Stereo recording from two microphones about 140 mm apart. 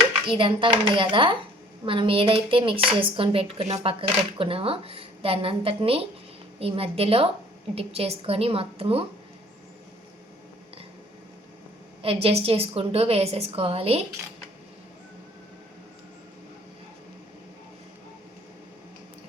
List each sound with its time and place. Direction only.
0.3 s a woman's voice: 40° right (ahead or behind)
12.0 s a woman's voice: 45° right (ahead or behind)